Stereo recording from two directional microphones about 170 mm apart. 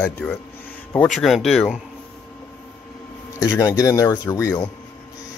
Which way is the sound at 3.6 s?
20° left (ahead or behind).